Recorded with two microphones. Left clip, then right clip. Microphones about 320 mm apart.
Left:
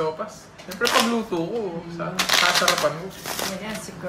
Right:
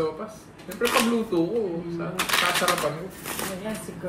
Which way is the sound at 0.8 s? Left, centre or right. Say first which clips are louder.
Left 2 dB; left.